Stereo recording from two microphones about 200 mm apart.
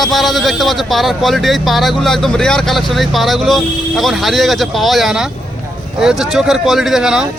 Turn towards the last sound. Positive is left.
turn(degrees=-5)  # may be behind; listen again after turning